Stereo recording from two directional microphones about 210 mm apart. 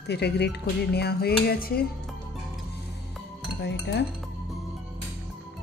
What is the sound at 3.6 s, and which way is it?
Speech, 55° left (ahead or behind).